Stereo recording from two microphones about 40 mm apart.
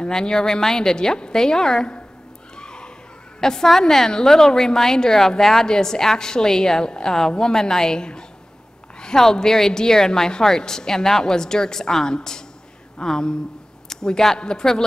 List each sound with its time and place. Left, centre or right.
0.1 s a woman's voice: centre
2.5 s a sound: left
3.3 s a woman's voice: centre